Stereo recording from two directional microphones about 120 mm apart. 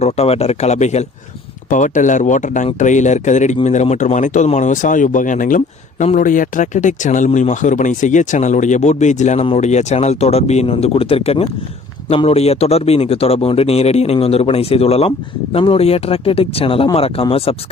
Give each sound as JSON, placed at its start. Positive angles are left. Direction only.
{"t": 0.0, "sound": "a man's voice", "side_deg": 60}
{"t": 1.7, "sound": "a man's voice", "side_deg": 90}